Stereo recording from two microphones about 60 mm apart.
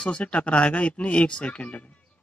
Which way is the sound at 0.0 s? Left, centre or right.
Centre.